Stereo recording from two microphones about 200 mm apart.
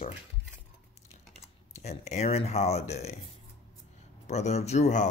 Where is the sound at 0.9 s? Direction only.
35° left (ahead or behind).